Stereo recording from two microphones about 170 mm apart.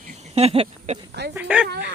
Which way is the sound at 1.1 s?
80° right.